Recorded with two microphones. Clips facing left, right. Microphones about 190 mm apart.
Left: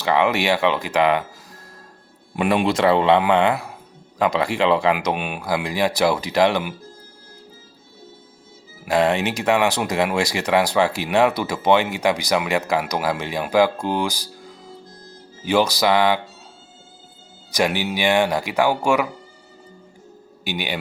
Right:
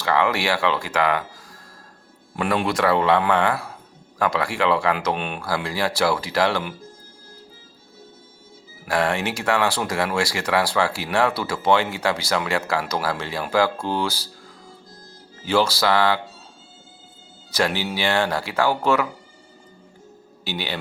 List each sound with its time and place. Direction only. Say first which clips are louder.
0.0 s speech: left 2 dB; 20° left (ahead or behind)
2.3 s speech: left 3 dB; 15° left (ahead or behind)
8.8 s speech: left 4 dB; 20° left (ahead or behind)
15.4 s speech: left 2 dB; 15° left (ahead or behind)
17.5 s speech: left 2 dB; 15° left (ahead or behind)
20.4 s a man's voice: left 2 dB; 15° left (ahead or behind)